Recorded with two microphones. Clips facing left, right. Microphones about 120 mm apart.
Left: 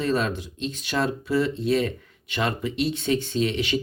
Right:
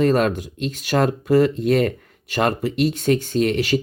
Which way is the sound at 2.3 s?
45° right (ahead or behind).